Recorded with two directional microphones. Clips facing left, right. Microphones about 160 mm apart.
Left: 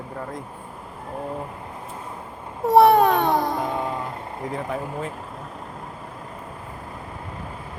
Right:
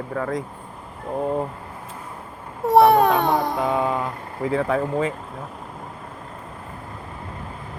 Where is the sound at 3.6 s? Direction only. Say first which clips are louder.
Right 5 dB; 90° right.